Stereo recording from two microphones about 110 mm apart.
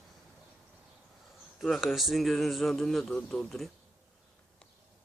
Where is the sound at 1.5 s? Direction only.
Centre (ahead or behind).